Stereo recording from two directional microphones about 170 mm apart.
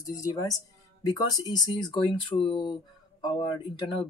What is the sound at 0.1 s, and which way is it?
Speech, 20° left (ahead or behind).